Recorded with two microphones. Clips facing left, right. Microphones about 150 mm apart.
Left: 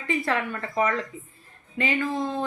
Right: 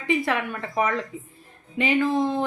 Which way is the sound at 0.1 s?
15° right (ahead or behind).